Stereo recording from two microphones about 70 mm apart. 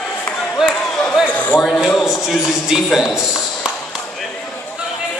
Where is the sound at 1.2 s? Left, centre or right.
Left.